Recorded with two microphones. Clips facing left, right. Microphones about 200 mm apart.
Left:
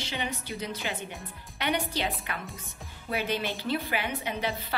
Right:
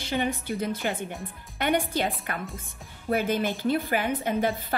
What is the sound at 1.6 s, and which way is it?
Speech, 50° right (ahead or behind).